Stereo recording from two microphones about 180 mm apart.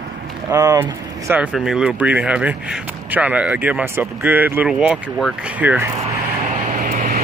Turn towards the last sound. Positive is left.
turn(degrees=-50)  # may be behind; listen again after turning